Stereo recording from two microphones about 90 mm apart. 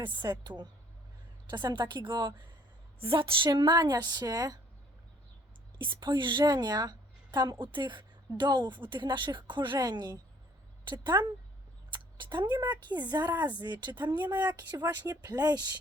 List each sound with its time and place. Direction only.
0.0 s a woman's voice: 55° right (ahead or behind)
3.0 s a woman's voice: 85° right; by 4.6 s 45° right (ahead or behind)
5.8 s speech: 60° right (ahead or behind)
6.4 s a woman's voice: 45° right (ahead or behind)
9.7 s a woman's voice: 45° right (ahead or behind)